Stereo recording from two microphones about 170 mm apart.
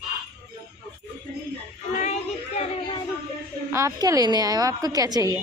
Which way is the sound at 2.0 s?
40° left (ahead or behind).